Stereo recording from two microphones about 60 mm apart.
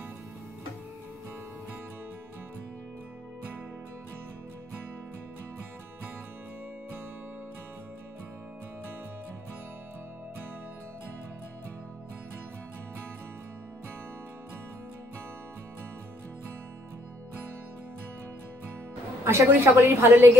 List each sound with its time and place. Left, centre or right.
19.2 s a woman's voice: right